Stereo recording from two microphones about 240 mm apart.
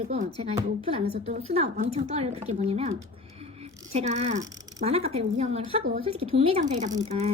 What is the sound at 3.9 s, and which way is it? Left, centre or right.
Speech, right.